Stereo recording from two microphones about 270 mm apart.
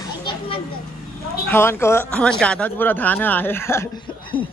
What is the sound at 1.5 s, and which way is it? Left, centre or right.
Speech, centre.